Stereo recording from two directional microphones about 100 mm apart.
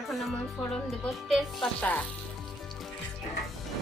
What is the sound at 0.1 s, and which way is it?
Speech, centre (ahead or behind).